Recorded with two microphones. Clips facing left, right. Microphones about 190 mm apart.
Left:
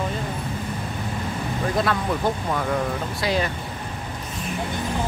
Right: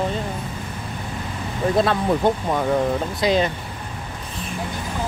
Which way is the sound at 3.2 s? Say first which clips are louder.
Right 5 dB; 20° right (ahead or behind).